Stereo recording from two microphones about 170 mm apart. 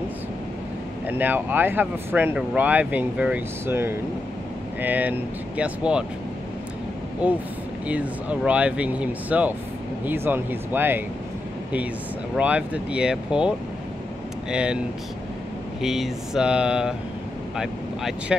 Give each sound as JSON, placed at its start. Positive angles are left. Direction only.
{"t": 1.0, "sound": "speech", "side_deg": -10}
{"t": 7.9, "sound": "speech", "side_deg": -10}
{"t": 12.4, "sound": "speech", "side_deg": -5}
{"t": 15.8, "sound": "speech", "side_deg": 0}